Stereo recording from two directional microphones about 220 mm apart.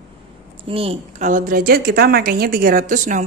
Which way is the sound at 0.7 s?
25° right (ahead or behind).